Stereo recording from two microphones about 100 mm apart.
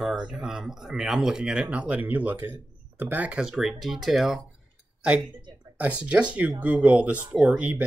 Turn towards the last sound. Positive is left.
turn(degrees=-10)  # may be behind; listen again after turning